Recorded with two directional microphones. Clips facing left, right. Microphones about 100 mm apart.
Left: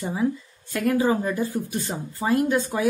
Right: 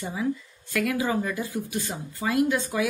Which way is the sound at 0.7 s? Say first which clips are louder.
Left 4 dB; 35° left (ahead or behind).